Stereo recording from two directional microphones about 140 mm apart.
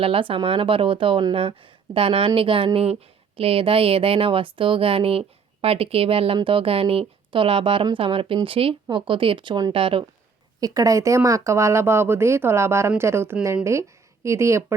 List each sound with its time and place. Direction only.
0.0 s speech: 40° right (ahead or behind)
10.6 s a woman's voice: 25° right (ahead or behind)